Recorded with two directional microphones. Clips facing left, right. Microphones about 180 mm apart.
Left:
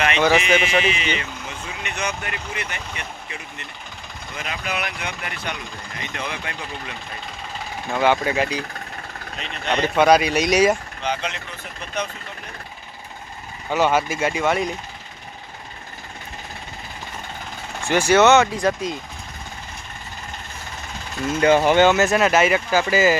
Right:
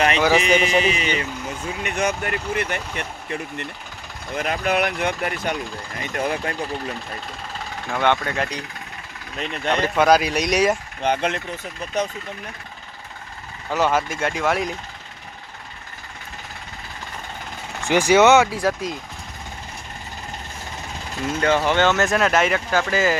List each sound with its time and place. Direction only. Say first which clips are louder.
0.4 s speech: right 1 dB; 40° right (ahead or behind); by 5.1 s 55° right (ahead or behind)
5.2 s speech: right 6 dB; 45° right (ahead or behind)
7.9 s speech: left 2 dB; 5° left (ahead or behind)
9.4 s speech: right 1 dB; 50° right (ahead or behind)
9.8 s speech: left 2 dB; centre (ahead or behind)
11.0 s speech: right 7 dB; 55° right (ahead or behind)
13.7 s speech: left 1 dB; centre (ahead or behind)
17.8 s speech: right 1 dB; 15° right (ahead or behind)
21.4 s speech: left 4 dB; 15° left (ahead or behind)